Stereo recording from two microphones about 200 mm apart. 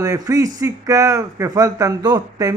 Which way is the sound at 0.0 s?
20° right (ahead or behind).